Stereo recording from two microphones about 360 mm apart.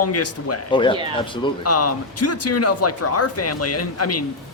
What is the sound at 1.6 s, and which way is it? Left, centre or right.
Speech, left.